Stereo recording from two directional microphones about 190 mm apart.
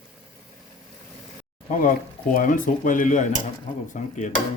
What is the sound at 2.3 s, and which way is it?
Speech, 45° left (ahead or behind).